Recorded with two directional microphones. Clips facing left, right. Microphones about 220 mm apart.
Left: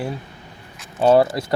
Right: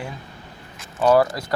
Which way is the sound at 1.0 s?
25° left (ahead or behind).